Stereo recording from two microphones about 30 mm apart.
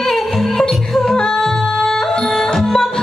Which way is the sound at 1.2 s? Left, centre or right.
Centre.